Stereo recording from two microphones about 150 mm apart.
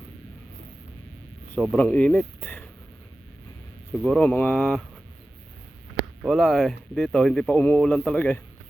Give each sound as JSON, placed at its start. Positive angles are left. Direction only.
{"t": 1.7, "sound": "speech", "side_deg": 10}
{"t": 4.0, "sound": "speech", "side_deg": 10}
{"t": 6.2, "sound": "speech", "side_deg": 0}